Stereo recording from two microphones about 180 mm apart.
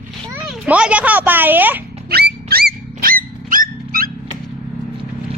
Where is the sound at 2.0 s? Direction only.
60° right (ahead or behind).